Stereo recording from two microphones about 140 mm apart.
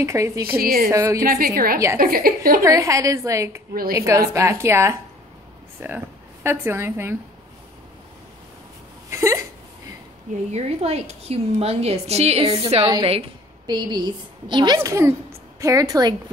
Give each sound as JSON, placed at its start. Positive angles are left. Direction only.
{"t": 0.0, "sound": "a woman's voice", "side_deg": -20}
{"t": 0.6, "sound": "a woman's voice", "side_deg": -90}
{"t": 0.8, "sound": "a woman's voice", "side_deg": -20}
{"t": 1.2, "sound": "a woman's voice", "side_deg": -90}
{"t": 2.6, "sound": "a woman's voice", "side_deg": -20}
{"t": 9.1, "sound": "a woman's voice", "side_deg": -20}
{"t": 10.5, "sound": "a woman's voice", "side_deg": -50}
{"t": 12.8, "sound": "a woman's voice", "side_deg": -35}
{"t": 14.8, "sound": "a woman's voice", "side_deg": -20}